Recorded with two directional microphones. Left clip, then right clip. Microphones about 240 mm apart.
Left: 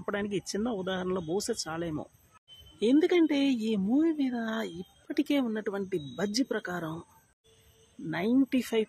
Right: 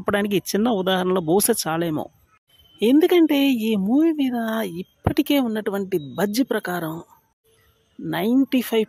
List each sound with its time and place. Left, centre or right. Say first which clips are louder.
0.0 s speech: right 11 dB; right
8.1 s speech: right 7 dB; right